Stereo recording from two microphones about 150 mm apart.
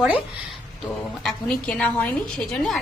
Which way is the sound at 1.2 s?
5° left (ahead or behind).